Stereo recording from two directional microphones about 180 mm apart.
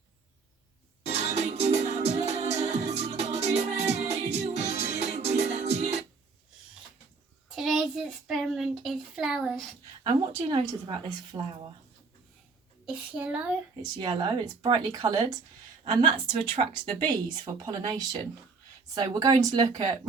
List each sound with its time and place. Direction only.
1.0 s music: 40° right (ahead or behind)
7.5 s a sound: centre (ahead or behind)
10.3 s speech: 30° right (ahead or behind)
12.8 s a child's voice: 5° right (ahead or behind)
14.0 s speech: 25° right (ahead or behind)